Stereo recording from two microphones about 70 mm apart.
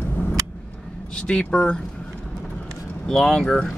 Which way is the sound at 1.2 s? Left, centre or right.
Centre.